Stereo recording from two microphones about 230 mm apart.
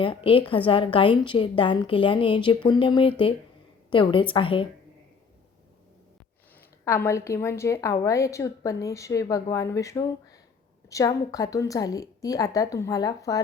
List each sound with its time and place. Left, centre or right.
0.0 s a woman's voice: left
6.8 s a woman's voice: centre